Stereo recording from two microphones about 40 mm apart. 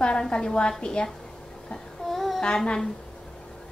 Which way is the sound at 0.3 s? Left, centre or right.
Left.